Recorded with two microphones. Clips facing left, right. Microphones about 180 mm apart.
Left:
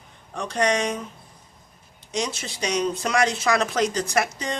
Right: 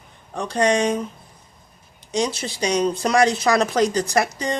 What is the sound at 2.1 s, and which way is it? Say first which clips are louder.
Speech: right 5 dB; 35° right (ahead or behind).